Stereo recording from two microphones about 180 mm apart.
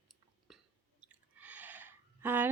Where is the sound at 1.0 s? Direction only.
10° right (ahead or behind).